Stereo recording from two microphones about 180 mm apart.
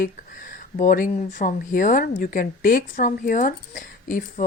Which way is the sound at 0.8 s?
50° left (ahead or behind).